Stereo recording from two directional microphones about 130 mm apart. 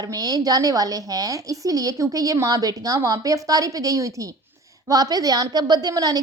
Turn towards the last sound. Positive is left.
turn(degrees=-30)  # may be behind; listen again after turning